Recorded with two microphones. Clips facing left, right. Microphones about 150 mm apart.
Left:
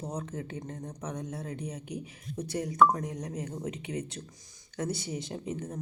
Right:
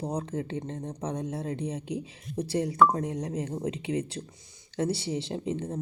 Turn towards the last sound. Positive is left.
turn(degrees=-25)  # may be behind; listen again after turning